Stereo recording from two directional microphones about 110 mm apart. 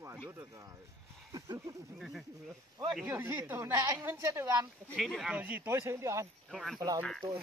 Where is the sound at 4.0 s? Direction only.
25° right (ahead or behind).